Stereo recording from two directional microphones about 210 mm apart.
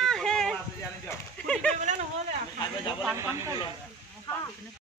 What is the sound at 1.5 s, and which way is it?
Speech, 5° left (ahead or behind).